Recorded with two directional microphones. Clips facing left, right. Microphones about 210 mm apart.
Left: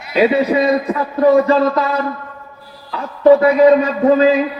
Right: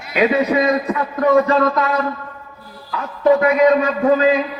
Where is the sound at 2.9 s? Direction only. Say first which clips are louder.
Left 5 dB; 30° left (ahead or behind).